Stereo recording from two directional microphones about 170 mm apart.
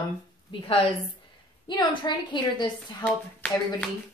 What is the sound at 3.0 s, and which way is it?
Speech, 10° left (ahead or behind).